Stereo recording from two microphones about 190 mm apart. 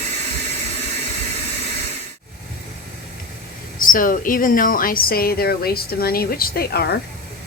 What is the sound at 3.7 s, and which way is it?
A woman's voice, 45° left (ahead or behind).